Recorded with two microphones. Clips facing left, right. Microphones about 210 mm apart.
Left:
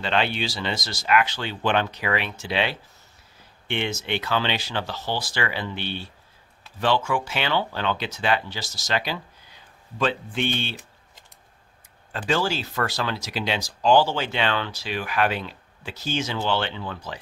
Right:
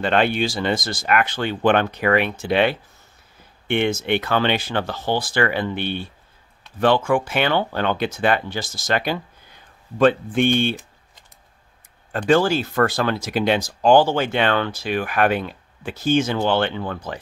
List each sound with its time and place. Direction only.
0.0 s speech: 50° right (ahead or behind)
12.1 s speech: 50° right (ahead or behind)